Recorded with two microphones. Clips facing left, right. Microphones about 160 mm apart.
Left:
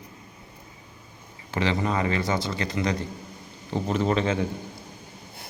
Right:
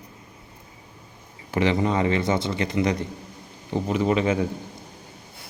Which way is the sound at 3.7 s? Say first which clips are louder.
Right 2 dB; 10° right (ahead or behind).